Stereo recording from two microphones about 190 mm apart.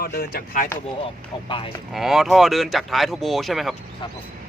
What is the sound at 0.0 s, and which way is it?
Speech, 50° left (ahead or behind).